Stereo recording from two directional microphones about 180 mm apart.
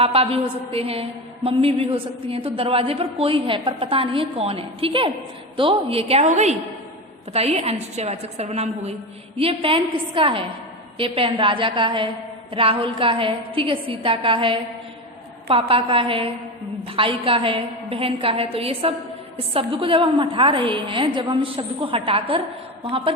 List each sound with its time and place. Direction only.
0.0 s a woman's voice: 30° right (ahead or behind)